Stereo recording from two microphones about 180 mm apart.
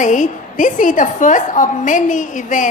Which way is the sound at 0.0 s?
45° left (ahead or behind).